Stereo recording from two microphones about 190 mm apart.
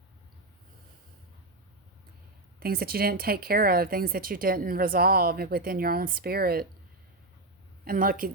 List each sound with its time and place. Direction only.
2.6 s speech: 55° right (ahead or behind)
7.9 s speech: 45° right (ahead or behind)